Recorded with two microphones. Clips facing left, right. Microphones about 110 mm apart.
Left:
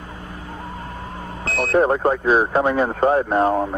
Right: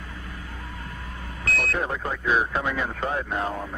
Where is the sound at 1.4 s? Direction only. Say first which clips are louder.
Left 7 dB; 30° left (ahead or behind).